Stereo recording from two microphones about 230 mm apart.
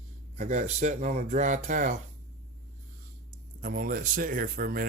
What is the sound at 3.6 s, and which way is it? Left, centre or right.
Speech, right.